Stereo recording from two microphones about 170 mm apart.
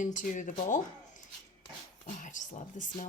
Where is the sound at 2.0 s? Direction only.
50° left (ahead or behind).